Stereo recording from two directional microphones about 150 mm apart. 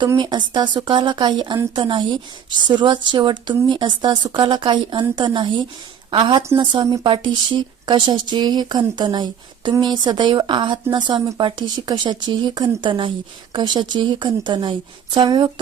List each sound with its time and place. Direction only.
0.2 s a woman's voice: 30° right (ahead or behind)